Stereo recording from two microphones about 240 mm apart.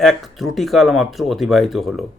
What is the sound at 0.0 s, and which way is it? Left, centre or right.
Speech, centre.